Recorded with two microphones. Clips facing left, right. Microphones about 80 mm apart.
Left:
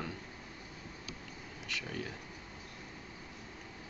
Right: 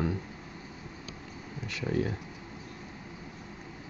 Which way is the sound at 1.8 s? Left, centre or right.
Right.